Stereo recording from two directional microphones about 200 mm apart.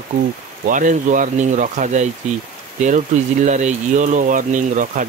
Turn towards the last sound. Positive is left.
turn(degrees=-40)  # may be behind; listen again after turning